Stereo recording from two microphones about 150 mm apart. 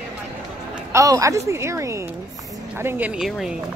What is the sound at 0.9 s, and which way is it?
A man's voice, 20° right (ahead or behind).